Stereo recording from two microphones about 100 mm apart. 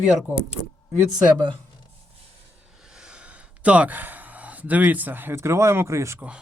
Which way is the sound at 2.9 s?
10° right (ahead or behind).